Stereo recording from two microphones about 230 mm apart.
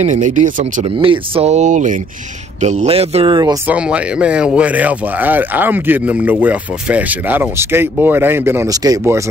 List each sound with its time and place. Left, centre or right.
0.0 s speech: right
0.8 s speech: right
3.6 s speech: centre